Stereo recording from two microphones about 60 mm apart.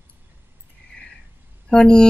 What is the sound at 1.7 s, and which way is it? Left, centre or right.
Speech, centre.